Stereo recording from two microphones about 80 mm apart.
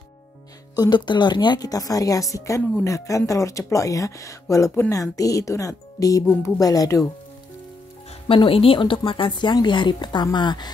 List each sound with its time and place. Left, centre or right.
0.7 s a woman's voice: left
8.4 s speech: left